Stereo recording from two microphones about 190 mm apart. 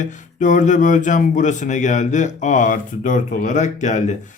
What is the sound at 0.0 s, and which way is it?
A man's voice, 40° left (ahead or behind).